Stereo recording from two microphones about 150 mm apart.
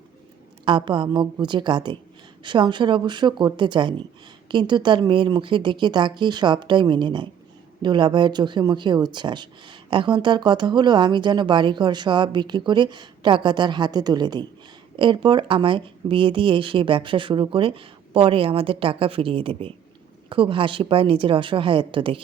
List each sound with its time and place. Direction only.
0.6 s speech: 35° right (ahead or behind)